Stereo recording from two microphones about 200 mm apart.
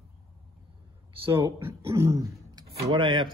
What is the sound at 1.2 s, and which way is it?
A man's voice, 10° right (ahead or behind).